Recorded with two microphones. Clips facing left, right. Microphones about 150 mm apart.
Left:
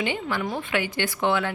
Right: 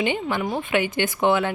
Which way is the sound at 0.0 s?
20° right (ahead or behind).